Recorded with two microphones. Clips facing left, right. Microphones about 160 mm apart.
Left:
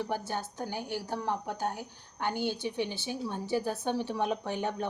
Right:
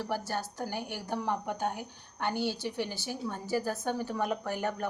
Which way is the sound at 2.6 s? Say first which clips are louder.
Left 1 dB; 60° left (ahead or behind).